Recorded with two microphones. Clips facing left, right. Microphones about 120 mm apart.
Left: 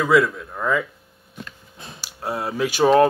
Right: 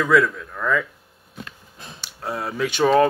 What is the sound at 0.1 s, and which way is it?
Speech, 10° left (ahead or behind).